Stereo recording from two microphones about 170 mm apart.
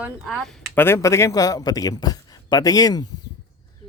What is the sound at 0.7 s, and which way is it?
Speech, 15° left (ahead or behind).